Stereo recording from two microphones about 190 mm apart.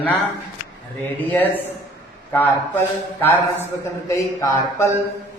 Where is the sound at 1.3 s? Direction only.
10° left (ahead or behind).